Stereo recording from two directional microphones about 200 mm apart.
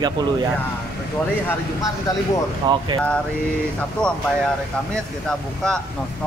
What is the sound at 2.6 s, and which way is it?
Speech, 20° right (ahead or behind).